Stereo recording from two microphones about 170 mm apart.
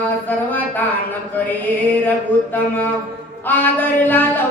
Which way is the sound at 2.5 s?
10° left (ahead or behind).